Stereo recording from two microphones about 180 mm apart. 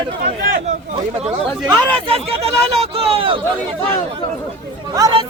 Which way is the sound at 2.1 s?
35° right (ahead or behind).